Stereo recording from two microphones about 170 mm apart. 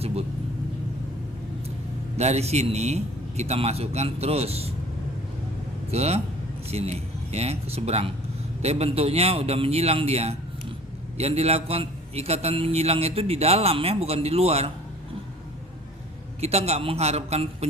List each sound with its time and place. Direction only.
0.0 s vehicle: 35° right (ahead or behind)
2.1 s a man's voice: 40° right (ahead or behind)
5.9 s a man's voice: 40° right (ahead or behind)
16.4 s a man's voice: 40° right (ahead or behind)